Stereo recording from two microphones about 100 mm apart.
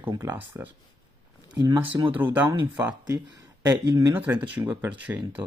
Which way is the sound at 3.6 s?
40° right (ahead or behind).